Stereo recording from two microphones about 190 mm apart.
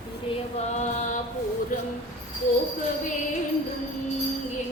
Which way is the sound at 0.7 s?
40° left (ahead or behind).